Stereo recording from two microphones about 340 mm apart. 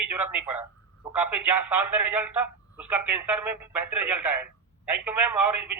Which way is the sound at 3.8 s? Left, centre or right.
Right.